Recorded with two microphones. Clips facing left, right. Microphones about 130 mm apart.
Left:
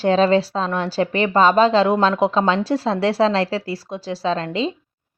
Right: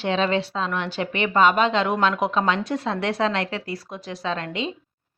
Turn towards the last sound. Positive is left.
turn(degrees=30)  # may be behind; listen again after turning